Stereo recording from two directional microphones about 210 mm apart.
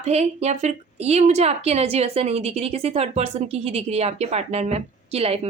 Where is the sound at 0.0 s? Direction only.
30° right (ahead or behind).